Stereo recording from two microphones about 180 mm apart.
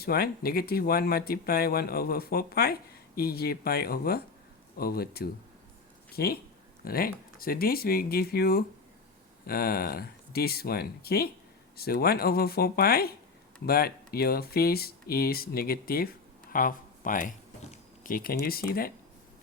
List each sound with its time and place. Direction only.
0.0 s speech: 60° left (ahead or behind)